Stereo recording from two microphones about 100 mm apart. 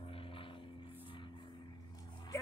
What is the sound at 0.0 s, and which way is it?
Music, 65° left (ahead or behind).